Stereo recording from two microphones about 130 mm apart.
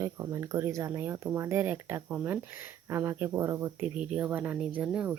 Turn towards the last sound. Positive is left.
turn(degrees=-10)  # may be behind; listen again after turning